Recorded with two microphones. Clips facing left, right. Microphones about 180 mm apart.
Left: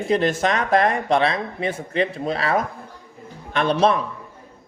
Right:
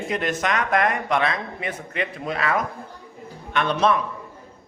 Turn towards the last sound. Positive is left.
turn(degrees=30)  # may be behind; listen again after turning